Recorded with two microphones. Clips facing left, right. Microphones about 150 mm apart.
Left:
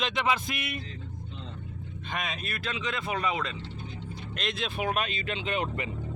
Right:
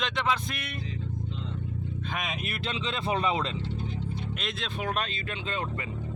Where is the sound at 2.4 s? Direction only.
25° right (ahead or behind).